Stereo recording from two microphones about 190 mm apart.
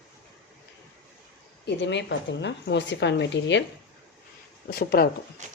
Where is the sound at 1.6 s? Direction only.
70° left (ahead or behind).